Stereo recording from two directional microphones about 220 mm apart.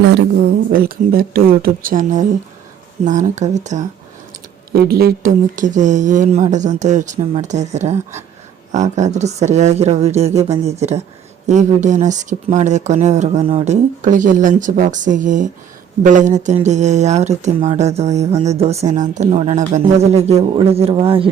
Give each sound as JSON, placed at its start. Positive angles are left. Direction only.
{"t": 0.0, "sound": "speech", "side_deg": -50}
{"t": 4.7, "sound": "speech", "side_deg": -45}
{"t": 14.0, "sound": "speech", "side_deg": -35}